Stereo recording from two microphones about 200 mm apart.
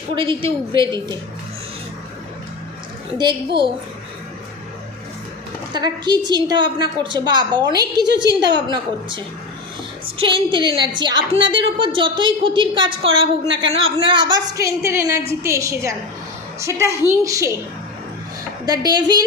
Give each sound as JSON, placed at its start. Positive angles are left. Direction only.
{"t": 0.2, "sound": "a woman's voice", "side_deg": -25}
{"t": 3.2, "sound": "a woman's voice", "side_deg": -25}
{"t": 5.7, "sound": "a woman's voice", "side_deg": -20}
{"t": 8.0, "sound": "a woman's voice", "side_deg": -60}
{"t": 8.7, "sound": "a woman's voice", "side_deg": -25}
{"t": 18.6, "sound": "a woman's voice", "side_deg": -20}